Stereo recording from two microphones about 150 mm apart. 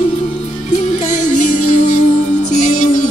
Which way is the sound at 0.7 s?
55° left (ahead or behind).